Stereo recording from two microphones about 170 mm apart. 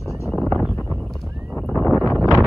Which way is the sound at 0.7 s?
15° left (ahead or behind).